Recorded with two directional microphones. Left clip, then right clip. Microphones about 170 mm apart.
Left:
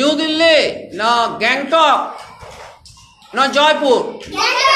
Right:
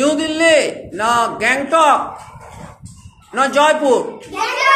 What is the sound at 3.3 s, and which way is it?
Speech, 10° right (ahead or behind).